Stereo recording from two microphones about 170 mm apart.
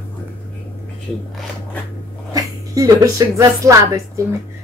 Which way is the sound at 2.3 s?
20° right (ahead or behind).